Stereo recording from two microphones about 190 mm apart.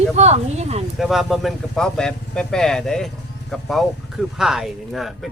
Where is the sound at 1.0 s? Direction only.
Centre (ahead or behind).